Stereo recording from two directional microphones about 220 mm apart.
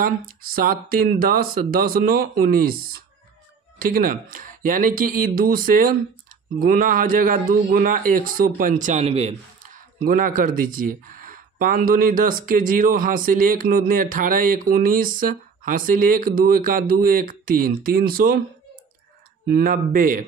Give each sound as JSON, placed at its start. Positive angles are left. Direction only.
{"t": 0.0, "sound": "a man's voice", "side_deg": -40}
{"t": 19.4, "sound": "a man's voice", "side_deg": -45}